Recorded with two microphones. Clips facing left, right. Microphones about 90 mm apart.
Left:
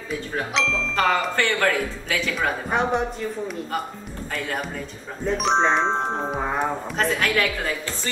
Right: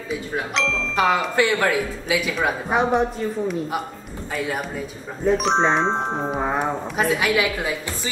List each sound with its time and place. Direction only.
0.1 s speech: centre (ahead or behind)